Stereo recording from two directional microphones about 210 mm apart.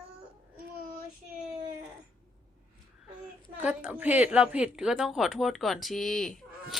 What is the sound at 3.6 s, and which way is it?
A woman's voice, 5° right (ahead or behind).